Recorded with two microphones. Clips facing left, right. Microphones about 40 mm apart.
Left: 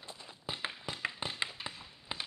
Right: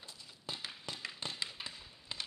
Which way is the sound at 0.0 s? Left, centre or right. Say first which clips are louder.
Left 5 dB; left.